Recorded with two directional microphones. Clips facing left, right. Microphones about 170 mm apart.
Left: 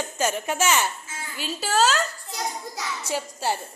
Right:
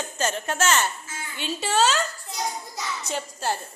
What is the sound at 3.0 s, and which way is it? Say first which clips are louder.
Speech: left 2 dB; 10° left (ahead or behind).